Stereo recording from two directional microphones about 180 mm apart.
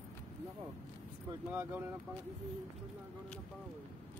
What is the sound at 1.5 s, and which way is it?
Speech, 10° right (ahead or behind).